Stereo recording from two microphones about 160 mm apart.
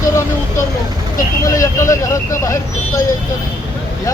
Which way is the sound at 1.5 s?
20° left (ahead or behind).